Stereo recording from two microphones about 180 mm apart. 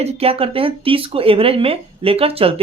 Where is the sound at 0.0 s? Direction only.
35° right (ahead or behind).